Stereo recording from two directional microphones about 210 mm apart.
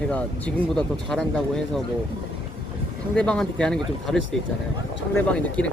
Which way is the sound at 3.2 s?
5° left (ahead or behind).